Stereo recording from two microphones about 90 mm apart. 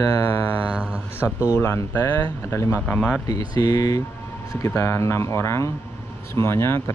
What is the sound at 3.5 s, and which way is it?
Speech, 45° left (ahead or behind).